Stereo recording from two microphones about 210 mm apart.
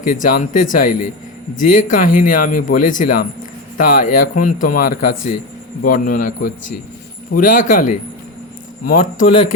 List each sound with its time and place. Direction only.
0.0 s speech: 40° left (ahead or behind)